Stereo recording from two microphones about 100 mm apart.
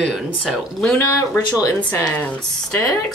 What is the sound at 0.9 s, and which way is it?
Speech, 25° left (ahead or behind).